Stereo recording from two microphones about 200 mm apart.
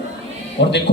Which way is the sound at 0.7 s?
60° left (ahead or behind).